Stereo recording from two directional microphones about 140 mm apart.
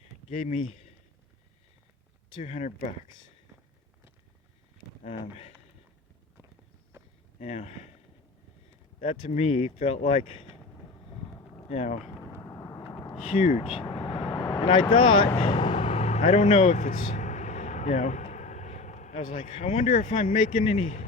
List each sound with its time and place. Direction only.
0.3 s speech: 55° left (ahead or behind)
2.4 s speech: 50° left (ahead or behind)
5.0 s speech: 45° left (ahead or behind)
7.3 s speech: 50° left (ahead or behind)
9.0 s speech: 50° left (ahead or behind)
11.7 s speech: 50° left (ahead or behind)
12.4 s vehicle: 20° left (ahead or behind)
12.9 s a sound: 25° left (ahead or behind)
13.6 s vehicle: 35° left (ahead or behind)
14.5 s speech: 35° left (ahead or behind)
15.6 s vehicle: 45° left (ahead or behind); by 20.7 s 70° left (ahead or behind)
20.7 s speech: 50° left (ahead or behind)